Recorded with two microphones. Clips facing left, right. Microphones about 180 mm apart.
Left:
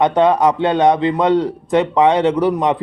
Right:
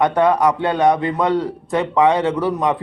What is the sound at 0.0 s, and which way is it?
Speech, 20° left (ahead or behind).